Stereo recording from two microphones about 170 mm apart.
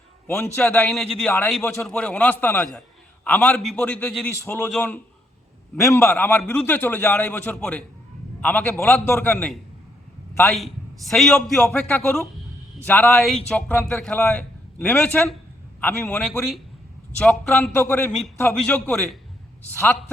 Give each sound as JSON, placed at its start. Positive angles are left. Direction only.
{"t": 0.3, "sound": "a man's voice", "side_deg": 10}